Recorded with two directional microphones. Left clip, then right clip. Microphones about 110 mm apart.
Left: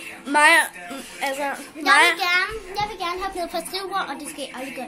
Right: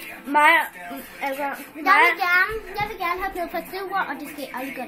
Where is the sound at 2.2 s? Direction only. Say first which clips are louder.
Right 2 dB; 10° right (ahead or behind).